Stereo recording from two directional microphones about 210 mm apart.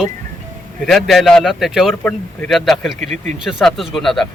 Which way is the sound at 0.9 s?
Centre (ahead or behind).